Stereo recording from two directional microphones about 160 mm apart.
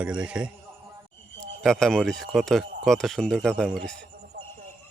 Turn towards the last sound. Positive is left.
turn(degrees=0)  # may be behind; listen again after turning